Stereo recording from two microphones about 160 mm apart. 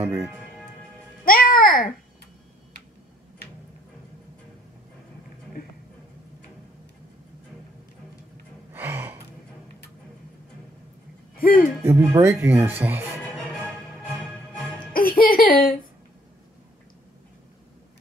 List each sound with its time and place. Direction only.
1.2 s music: 65° left (ahead or behind)
8.7 s gasp: 15° right (ahead or behind)
11.3 s a sound: 65° left (ahead or behind)
11.8 s speech: 15° right (ahead or behind)
13.2 s music: 10° left (ahead or behind)
15.0 s a sound: 65° left (ahead or behind)